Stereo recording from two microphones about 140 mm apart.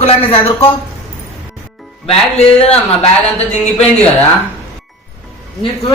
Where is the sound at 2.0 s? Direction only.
45° left (ahead or behind).